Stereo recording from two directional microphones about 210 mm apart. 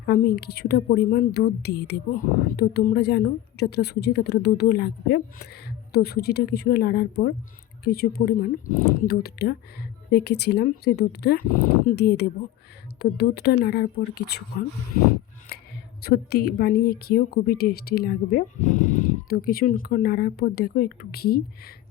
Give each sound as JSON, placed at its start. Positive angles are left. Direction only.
{"t": 0.0, "sound": "a woman's voice", "side_deg": 45}
{"t": 16.0, "sound": "a woman's voice", "side_deg": 50}